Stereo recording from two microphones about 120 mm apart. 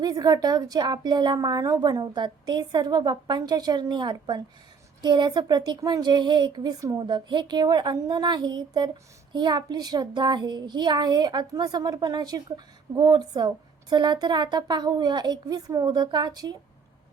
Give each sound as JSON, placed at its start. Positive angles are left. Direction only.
{"t": 0.0, "sound": "speech", "side_deg": -35}